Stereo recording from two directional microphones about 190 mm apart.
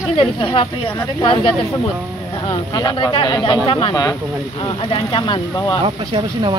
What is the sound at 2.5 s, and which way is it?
Speech, 20° left (ahead or behind).